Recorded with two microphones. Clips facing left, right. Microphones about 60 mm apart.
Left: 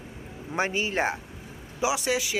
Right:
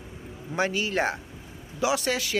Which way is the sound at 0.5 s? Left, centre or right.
Left.